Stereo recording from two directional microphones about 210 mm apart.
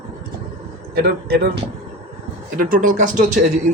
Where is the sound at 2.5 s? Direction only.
40° right (ahead or behind).